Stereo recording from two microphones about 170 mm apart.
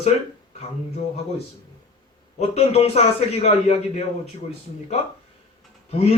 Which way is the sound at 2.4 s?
40° left (ahead or behind).